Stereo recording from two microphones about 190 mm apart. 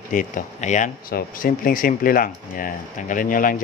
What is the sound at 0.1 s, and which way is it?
Speech, 45° left (ahead or behind).